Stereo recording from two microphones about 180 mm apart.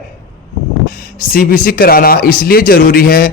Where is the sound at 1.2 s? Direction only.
50° left (ahead or behind).